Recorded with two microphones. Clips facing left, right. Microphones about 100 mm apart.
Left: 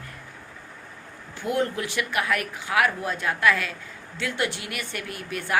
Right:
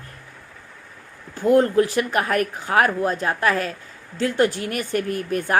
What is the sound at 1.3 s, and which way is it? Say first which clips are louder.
A woman's voice: right 10 dB; 40° right (ahead or behind).